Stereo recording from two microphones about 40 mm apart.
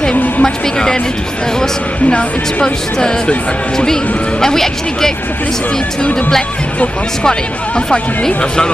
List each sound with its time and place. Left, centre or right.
0.4 s speech: centre
2.6 s speech: centre
7.2 s speech: centre